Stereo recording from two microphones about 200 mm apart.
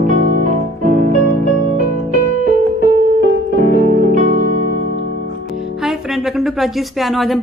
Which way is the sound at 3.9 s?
45° right (ahead or behind).